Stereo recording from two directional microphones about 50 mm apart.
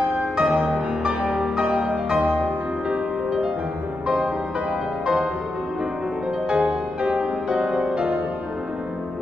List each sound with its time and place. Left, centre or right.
0.2 s music: right
1.0 s music: centre
2.9 s music: centre
5.0 s music: centre
6.5 s music: centre